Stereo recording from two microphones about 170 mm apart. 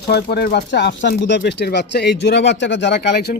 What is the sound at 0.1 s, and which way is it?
Speech, 70° left (ahead or behind).